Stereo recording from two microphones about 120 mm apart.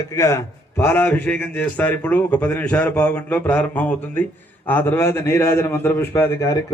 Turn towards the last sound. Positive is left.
turn(degrees=25)  # may be behind; listen again after turning